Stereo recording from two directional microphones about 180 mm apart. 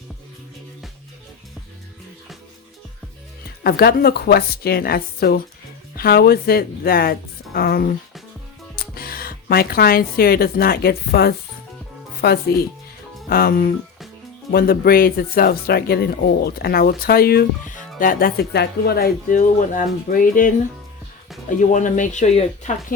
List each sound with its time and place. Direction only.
3.6 s speech: 60° left (ahead or behind)
9.0 s speech: 55° left (ahead or behind)
21.6 s speech: 45° left (ahead or behind)